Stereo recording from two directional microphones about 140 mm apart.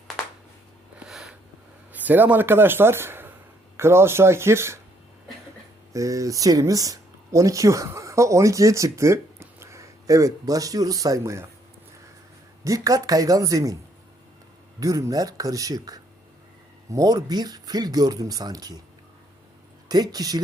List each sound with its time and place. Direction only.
0.9 s a sound: centre (ahead or behind)
1.9 s speech: 10° right (ahead or behind)
5.9 s speech: 25° right (ahead or behind)
12.6 s speech: 25° right (ahead or behind)
14.8 s speech: 25° right (ahead or behind)
19.9 s speech: 30° right (ahead or behind)